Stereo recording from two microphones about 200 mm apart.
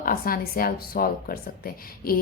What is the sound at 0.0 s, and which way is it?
Speech, 45° left (ahead or behind).